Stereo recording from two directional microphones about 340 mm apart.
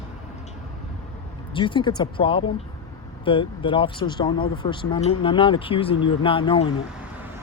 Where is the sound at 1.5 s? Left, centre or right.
Centre.